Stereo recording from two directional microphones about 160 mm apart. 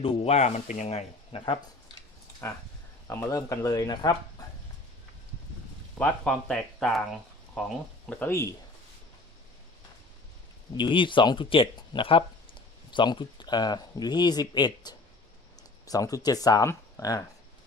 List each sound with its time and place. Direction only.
0.0 s speech: 40° left (ahead or behind)
3.1 s speech: 20° left (ahead or behind)
6.0 s speech: 5° left (ahead or behind)
8.2 s speech: 15° left (ahead or behind)
10.8 s speech: 30° left (ahead or behind)